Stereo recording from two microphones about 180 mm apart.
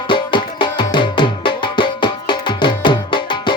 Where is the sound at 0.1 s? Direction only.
25° left (ahead or behind).